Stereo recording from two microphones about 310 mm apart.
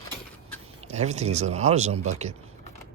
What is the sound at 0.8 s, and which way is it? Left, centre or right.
Speech, right.